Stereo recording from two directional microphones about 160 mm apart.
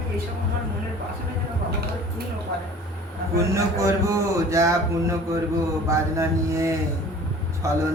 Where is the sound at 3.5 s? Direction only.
20° right (ahead or behind).